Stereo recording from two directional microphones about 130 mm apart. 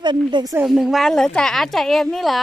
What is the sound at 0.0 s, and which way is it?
Speech, 35° right (ahead or behind).